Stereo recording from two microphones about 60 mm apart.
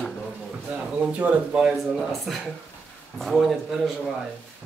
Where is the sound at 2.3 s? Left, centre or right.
Centre.